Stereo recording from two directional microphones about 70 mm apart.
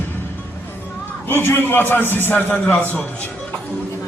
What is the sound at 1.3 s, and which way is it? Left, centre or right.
A man's voice, left.